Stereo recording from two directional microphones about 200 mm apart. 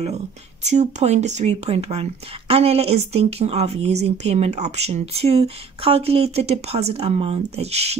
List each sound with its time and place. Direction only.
0.7 s speech: 35° right (ahead or behind)